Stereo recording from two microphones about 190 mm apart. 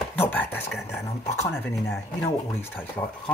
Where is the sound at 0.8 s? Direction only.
15° left (ahead or behind).